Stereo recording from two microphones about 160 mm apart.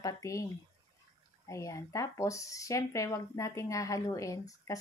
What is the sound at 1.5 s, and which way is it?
Speech, 20° left (ahead or behind).